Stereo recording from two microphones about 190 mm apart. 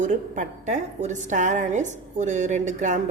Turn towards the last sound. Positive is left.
turn(degrees=-40)  # may be behind; listen again after turning